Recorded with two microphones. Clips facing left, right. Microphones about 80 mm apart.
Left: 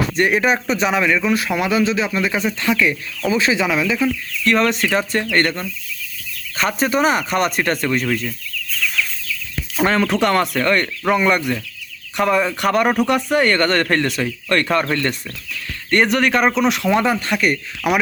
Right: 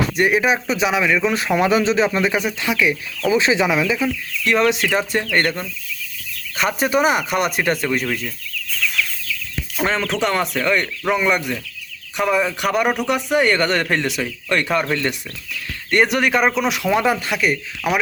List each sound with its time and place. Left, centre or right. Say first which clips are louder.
0.2 s speech: left 1 dB; centre
1.2 s a man's voice: right 1 dB; right
3.9 s speech: left 2 dB; centre
8.8 s chicken: even; centre
9.8 s speech: left 4 dB; centre